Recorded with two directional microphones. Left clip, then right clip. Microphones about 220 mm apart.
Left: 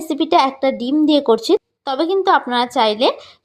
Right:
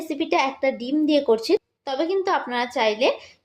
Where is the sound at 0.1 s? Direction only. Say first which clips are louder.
Left 8 dB; 40° left (ahead or behind).